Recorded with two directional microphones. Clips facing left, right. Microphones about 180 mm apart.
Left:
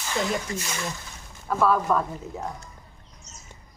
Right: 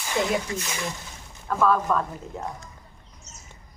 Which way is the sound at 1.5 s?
10° left (ahead or behind).